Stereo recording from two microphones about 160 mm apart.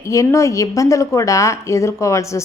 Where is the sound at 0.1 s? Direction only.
20° left (ahead or behind).